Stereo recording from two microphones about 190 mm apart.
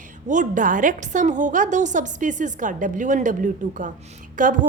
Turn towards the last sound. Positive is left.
turn(degrees=-45)  # may be behind; listen again after turning